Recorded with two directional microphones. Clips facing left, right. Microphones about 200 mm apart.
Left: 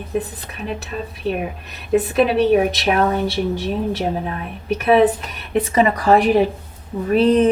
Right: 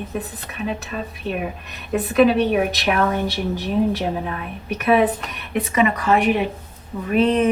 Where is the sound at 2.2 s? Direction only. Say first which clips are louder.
Left 2 dB; 30° left (ahead or behind).